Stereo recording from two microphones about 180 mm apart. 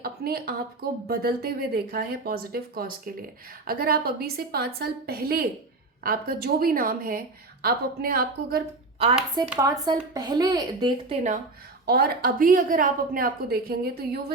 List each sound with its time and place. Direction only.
0.0 s speech: 55° right (ahead or behind)
9.3 s speech: 25° right (ahead or behind)
11.9 s speech: 55° right (ahead or behind)